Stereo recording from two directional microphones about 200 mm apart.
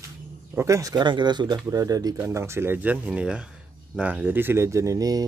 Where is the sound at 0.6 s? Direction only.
15° right (ahead or behind).